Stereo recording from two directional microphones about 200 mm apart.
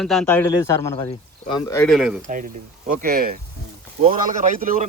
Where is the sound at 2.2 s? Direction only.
40° right (ahead or behind).